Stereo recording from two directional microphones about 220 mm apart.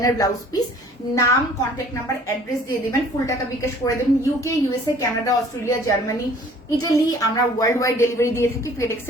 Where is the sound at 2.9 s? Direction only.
15° left (ahead or behind).